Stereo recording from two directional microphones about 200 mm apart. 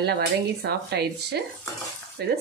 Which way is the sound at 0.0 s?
55° right (ahead or behind).